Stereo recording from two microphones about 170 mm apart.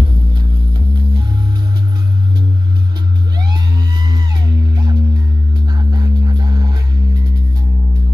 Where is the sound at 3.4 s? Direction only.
25° right (ahead or behind).